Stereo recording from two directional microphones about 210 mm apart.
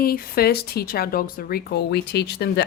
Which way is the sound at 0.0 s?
45° left (ahead or behind).